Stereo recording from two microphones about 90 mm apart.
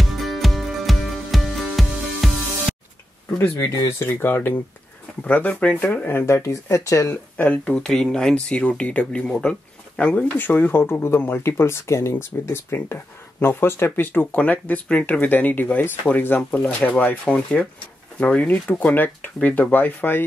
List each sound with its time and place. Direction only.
0.0 s music: centre (ahead or behind)
3.3 s speech: 25° left (ahead or behind)
7.3 s speech: 15° left (ahead or behind)